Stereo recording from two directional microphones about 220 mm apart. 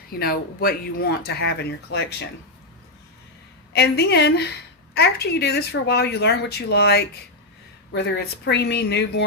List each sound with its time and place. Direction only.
0.1 s speech: 45° left (ahead or behind)
3.7 s speech: 50° left (ahead or behind)